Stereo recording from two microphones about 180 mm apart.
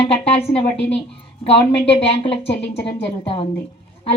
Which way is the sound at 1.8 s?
30° left (ahead or behind).